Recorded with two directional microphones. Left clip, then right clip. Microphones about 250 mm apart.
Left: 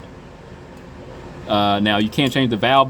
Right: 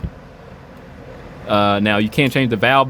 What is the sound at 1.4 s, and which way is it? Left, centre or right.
Speech, right.